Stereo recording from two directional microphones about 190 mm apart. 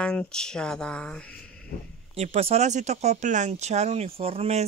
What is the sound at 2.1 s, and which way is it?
Speech, 35° right (ahead or behind).